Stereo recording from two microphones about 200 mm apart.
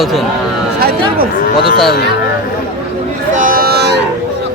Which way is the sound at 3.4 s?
45° right (ahead or behind).